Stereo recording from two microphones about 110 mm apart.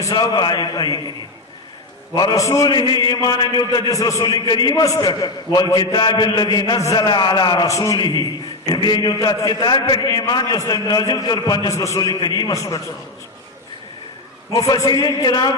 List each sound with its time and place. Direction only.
0.0 s a man's voice: 40° left (ahead or behind)
2.3 s a man's voice: 30° left (ahead or behind)
11.7 s a man's voice: 25° left (ahead or behind)
11.9 s a man's voice: 40° left (ahead or behind)
14.5 s a man's voice: 30° left (ahead or behind)